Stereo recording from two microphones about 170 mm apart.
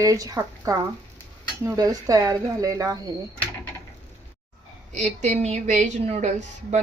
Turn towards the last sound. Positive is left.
turn(degrees=-45)  # may be behind; listen again after turning